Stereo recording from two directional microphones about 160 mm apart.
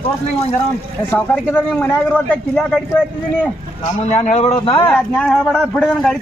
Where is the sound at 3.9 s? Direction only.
45° left (ahead or behind).